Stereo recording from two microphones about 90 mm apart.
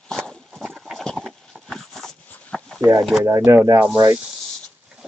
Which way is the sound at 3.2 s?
35° right (ahead or behind).